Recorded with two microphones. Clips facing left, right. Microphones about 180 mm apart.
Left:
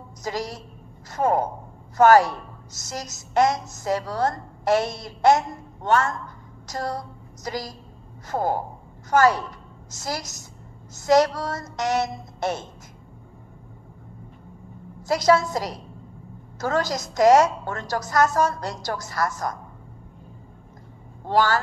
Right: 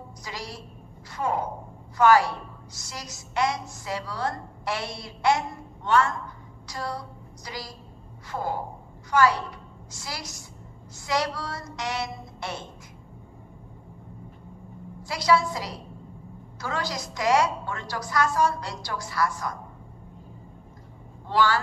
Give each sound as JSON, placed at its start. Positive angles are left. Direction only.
{"t": 0.2, "sound": "a woman's voice", "side_deg": 45}
{"t": 15.0, "sound": "a woman's voice", "side_deg": 45}
{"t": 21.3, "sound": "a woman's voice", "side_deg": 45}